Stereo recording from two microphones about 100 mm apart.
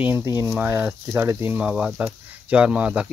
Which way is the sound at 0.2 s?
30° right (ahead or behind).